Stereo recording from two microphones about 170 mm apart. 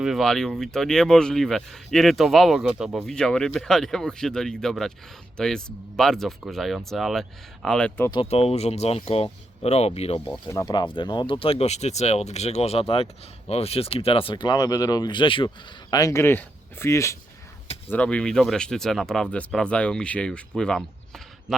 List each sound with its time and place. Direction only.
0.0 s speech: centre (ahead or behind)
8.1 s speech: 35° left (ahead or behind)
10.2 s speech: 5° left (ahead or behind)
10.5 s speech: 20° left (ahead or behind); by 20.8 s 5° left (ahead or behind)